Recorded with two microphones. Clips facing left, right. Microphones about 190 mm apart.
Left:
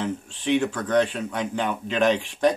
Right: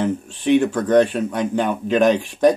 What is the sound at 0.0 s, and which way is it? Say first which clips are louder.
Speech: right 7 dB; 15° right (ahead or behind).